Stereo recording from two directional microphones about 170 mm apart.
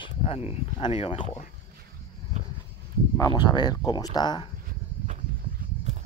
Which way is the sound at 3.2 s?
25° left (ahead or behind).